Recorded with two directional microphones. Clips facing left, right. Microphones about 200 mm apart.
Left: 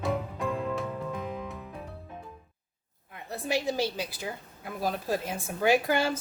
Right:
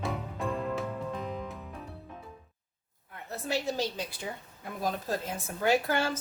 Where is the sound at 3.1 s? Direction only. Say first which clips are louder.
Left 2 dB; 15° left (ahead or behind).